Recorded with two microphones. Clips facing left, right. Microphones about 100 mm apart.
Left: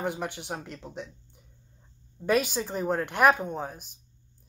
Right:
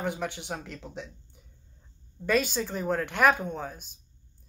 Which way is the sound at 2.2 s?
10° left (ahead or behind).